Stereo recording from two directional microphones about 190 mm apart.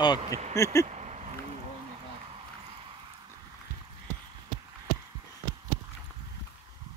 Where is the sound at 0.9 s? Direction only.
35° right (ahead or behind).